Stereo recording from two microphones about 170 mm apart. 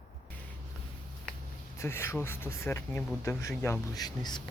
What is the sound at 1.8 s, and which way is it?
Speech, 15° left (ahead or behind).